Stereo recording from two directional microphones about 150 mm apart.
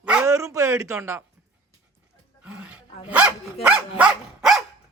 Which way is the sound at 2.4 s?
10° right (ahead or behind).